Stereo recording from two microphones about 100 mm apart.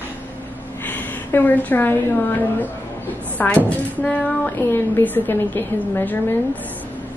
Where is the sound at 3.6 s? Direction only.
10° left (ahead or behind).